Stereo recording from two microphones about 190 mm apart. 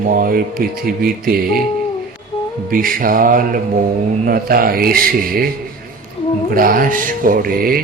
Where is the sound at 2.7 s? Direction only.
50° right (ahead or behind).